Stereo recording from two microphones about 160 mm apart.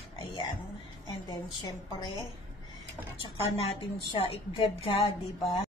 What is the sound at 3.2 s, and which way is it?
A woman's voice, 35° left (ahead or behind).